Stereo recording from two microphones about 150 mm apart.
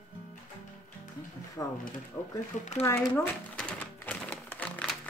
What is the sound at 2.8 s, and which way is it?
Typewriter, 15° left (ahead or behind).